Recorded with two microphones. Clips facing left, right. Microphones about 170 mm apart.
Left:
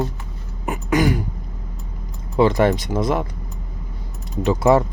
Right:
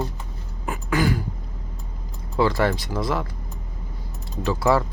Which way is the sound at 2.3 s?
20° left (ahead or behind).